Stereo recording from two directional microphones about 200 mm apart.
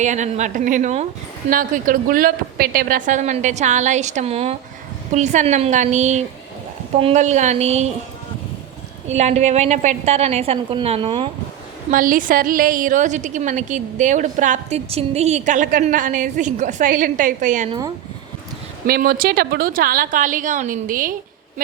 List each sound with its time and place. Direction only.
0.0 s a woman's voice: 35° right (ahead or behind)
9.0 s a woman's voice: 35° right (ahead or behind)
11.9 s a woman's voice: 45° right (ahead or behind)
17.7 s speech: 20° right (ahead or behind)
18.9 s a woman's voice: 45° right (ahead or behind)